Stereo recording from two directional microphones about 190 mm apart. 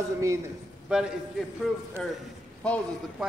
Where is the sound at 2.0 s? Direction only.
5° left (ahead or behind).